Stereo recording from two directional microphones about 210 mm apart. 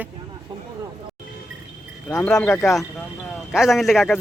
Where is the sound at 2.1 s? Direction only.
5° left (ahead or behind).